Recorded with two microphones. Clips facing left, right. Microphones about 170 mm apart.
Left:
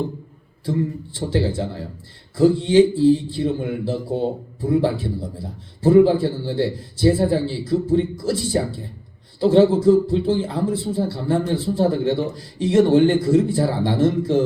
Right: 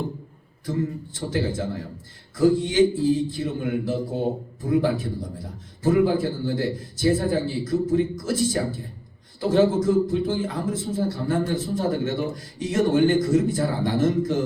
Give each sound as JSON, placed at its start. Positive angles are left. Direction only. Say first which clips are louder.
{"t": 1.1, "sound": "a man's voice", "louder": "left 5 dB", "side_deg": 30}